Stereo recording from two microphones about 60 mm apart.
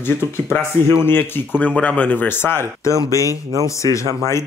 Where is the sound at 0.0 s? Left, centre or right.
Left.